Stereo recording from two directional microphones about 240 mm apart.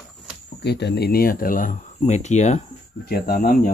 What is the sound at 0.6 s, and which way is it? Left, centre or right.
Speech, left.